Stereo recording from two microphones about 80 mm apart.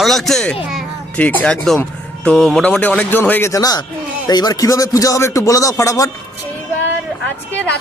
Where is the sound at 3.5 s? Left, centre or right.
Left.